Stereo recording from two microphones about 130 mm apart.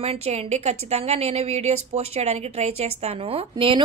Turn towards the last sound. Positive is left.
turn(degrees=-40)  # may be behind; listen again after turning